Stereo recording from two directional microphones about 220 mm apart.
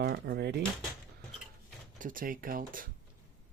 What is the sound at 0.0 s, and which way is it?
Speech, 45° right (ahead or behind).